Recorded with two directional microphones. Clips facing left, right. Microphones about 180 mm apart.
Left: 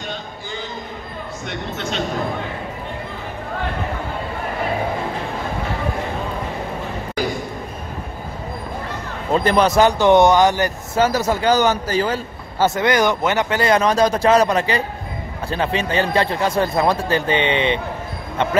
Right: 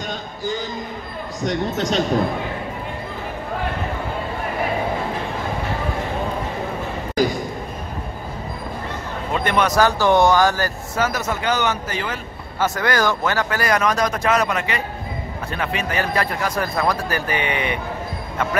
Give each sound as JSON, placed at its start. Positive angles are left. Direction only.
{"t": 1.4, "sound": "speech", "side_deg": -35}
{"t": 9.3, "sound": "a man's voice", "side_deg": 35}
{"t": 11.1, "sound": "a man's voice", "side_deg": 35}